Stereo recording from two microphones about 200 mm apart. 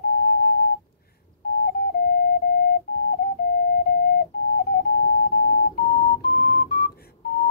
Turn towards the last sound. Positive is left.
turn(degrees=50)  # may be behind; listen again after turning